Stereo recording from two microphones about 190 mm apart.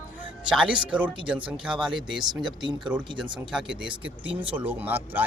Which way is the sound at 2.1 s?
20° right (ahead or behind).